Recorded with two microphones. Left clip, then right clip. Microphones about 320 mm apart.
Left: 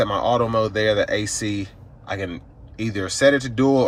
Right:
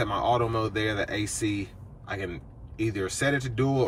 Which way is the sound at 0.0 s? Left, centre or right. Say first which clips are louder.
Left 6 dB; centre.